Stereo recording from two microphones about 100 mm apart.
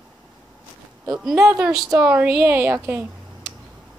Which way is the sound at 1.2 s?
5° right (ahead or behind).